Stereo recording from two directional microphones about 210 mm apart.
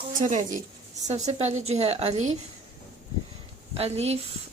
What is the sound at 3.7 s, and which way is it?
Speech, 30° right (ahead or behind).